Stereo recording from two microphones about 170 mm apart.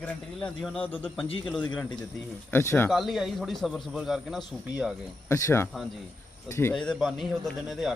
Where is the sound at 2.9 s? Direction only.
Centre (ahead or behind).